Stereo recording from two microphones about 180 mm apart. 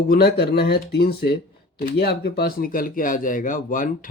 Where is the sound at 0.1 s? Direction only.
60° left (ahead or behind).